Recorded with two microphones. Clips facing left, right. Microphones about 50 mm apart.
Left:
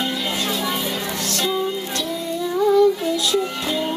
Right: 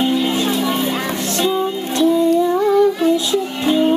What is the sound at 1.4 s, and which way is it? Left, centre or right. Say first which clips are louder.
Music: right 4 dB; centre.